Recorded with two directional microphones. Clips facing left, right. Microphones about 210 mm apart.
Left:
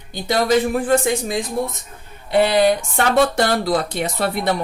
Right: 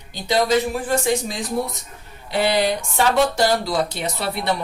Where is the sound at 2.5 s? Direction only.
55° left (ahead or behind).